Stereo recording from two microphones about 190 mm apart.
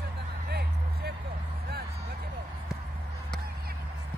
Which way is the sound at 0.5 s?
60° right (ahead or behind).